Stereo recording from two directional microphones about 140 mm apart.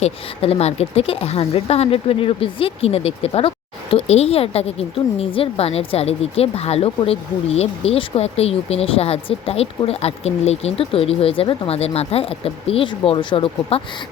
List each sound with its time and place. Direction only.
0.0 s speech: 45° left (ahead or behind)